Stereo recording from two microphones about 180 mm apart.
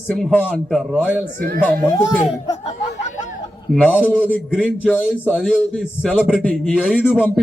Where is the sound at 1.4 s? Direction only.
55° right (ahead or behind).